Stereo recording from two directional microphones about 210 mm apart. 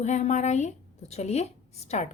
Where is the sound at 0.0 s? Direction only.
35° left (ahead or behind).